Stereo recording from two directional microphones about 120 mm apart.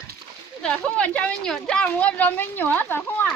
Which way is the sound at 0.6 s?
10° left (ahead or behind).